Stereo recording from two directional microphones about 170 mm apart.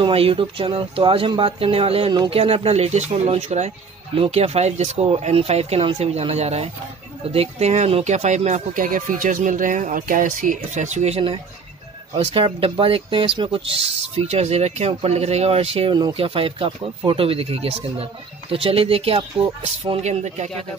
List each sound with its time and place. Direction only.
0.0 s speech: 35° right (ahead or behind)